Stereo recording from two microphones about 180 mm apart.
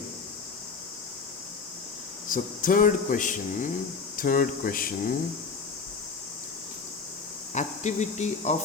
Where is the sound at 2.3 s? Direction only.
50° left (ahead or behind).